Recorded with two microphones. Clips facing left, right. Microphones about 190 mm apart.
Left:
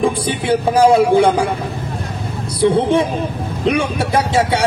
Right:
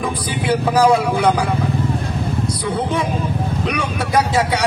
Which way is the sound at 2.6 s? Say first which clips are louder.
Left 10 dB; 25° left (ahead or behind).